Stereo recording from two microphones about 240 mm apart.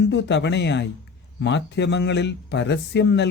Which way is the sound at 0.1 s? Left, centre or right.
Left.